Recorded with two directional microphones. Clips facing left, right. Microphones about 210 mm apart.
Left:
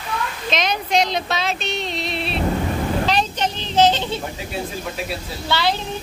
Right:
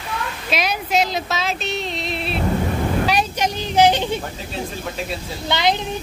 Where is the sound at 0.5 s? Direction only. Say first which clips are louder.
Even; 5° right (ahead or behind).